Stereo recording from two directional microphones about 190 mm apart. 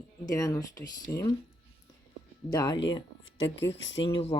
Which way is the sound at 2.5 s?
20° left (ahead or behind).